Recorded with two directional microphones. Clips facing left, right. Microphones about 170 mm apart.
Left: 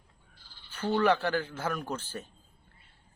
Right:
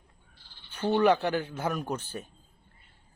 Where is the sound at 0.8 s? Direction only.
20° right (ahead or behind).